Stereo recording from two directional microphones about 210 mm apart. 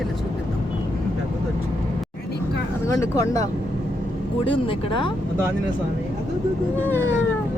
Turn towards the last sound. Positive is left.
turn(degrees=10)  # may be behind; listen again after turning